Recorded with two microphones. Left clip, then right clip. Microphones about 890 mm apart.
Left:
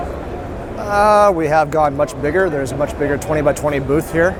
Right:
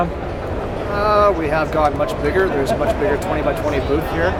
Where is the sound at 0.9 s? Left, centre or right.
Left.